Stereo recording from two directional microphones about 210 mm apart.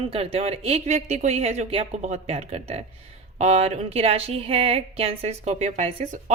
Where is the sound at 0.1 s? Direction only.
30° right (ahead or behind).